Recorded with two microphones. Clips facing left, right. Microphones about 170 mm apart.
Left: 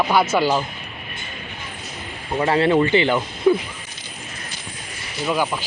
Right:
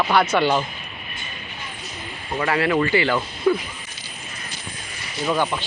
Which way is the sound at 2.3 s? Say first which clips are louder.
Left 4 dB; 25° left (ahead or behind).